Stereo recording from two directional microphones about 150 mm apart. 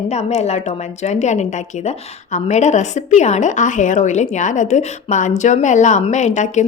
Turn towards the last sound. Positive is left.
turn(degrees=55)  # may be behind; listen again after turning